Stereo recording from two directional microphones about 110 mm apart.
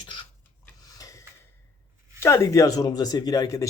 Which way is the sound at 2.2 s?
25° left (ahead or behind).